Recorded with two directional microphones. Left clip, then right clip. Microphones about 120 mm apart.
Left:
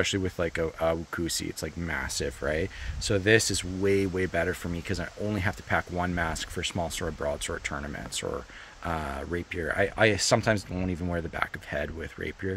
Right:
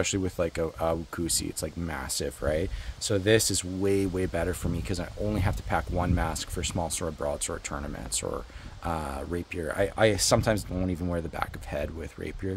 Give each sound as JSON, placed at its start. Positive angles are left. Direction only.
{"t": 0.0, "sound": "speech", "side_deg": -25}
{"t": 7.7, "sound": "speech", "side_deg": -15}